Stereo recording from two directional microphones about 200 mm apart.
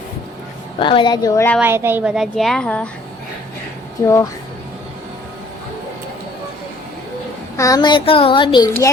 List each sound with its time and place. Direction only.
0.8 s speech: 25° left (ahead or behind)
1.6 s a woman's voice: 10° right (ahead or behind); by 2.9 s 5° left (ahead or behind)
4.0 s speech: 15° left (ahead or behind)
7.5 s speech: 15° left (ahead or behind)